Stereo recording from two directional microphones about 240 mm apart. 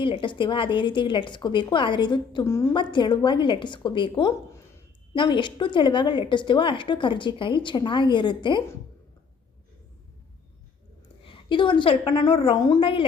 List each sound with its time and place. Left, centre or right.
0.0 s a woman's voice: left
11.2 s a woman's voice: left